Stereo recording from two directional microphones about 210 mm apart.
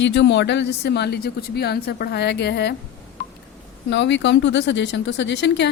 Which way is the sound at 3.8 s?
55° left (ahead or behind).